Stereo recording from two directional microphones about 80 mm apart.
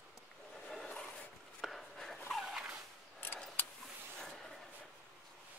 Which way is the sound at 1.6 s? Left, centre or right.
Centre.